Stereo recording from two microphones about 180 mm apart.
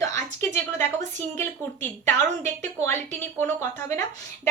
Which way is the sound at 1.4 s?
10° left (ahead or behind).